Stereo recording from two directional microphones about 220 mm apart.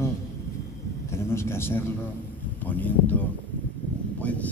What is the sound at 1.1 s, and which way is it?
Speech, 10° left (ahead or behind).